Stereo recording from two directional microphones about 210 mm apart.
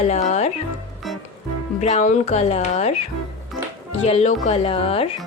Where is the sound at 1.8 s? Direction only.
35° left (ahead or behind).